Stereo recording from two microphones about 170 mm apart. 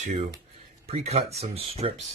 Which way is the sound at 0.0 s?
45° right (ahead or behind).